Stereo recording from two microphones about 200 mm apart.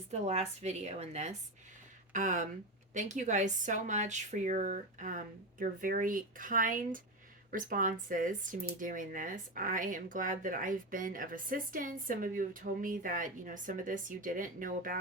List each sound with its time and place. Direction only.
0.1 s speech: 35° right (ahead or behind)